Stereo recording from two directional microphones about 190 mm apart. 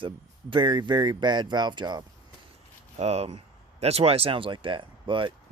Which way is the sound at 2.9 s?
35° right (ahead or behind).